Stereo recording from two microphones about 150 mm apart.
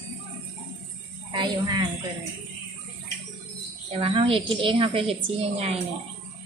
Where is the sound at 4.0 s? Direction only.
35° right (ahead or behind).